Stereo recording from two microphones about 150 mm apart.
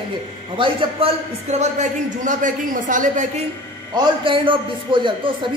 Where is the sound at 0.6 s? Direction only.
35° right (ahead or behind); by 3.3 s 60° right (ahead or behind).